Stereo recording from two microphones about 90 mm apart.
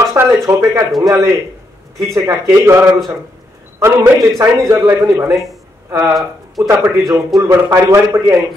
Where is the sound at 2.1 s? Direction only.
30° right (ahead or behind).